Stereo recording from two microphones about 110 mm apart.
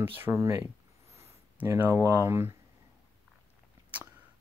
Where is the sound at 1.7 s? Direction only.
25° right (ahead or behind).